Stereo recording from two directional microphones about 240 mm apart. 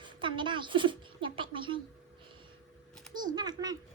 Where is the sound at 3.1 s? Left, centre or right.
Centre.